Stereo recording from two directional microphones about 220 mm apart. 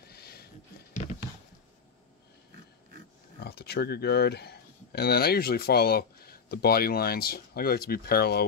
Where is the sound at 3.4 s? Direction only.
45° left (ahead or behind).